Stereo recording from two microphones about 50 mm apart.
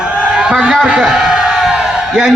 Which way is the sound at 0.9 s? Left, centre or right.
Centre.